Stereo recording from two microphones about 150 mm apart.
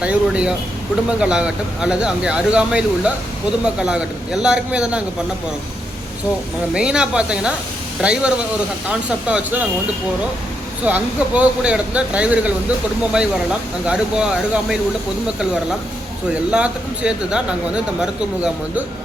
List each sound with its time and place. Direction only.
0.0 s speech: 5° right (ahead or behind)
6.7 s speech: 5° right (ahead or behind)
10.8 s speech: 10° right (ahead or behind)
13.8 s speech: 5° right (ahead or behind)
16.3 s speech: 5° right (ahead or behind)